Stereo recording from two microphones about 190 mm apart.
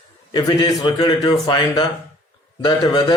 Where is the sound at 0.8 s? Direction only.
25° left (ahead or behind).